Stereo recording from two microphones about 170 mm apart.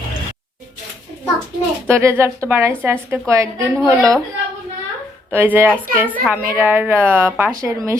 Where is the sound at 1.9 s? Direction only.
15° right (ahead or behind).